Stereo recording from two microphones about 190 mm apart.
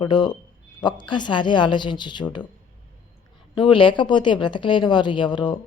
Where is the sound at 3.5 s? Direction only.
25° left (ahead or behind).